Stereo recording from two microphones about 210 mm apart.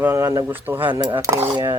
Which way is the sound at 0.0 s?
10° right (ahead or behind).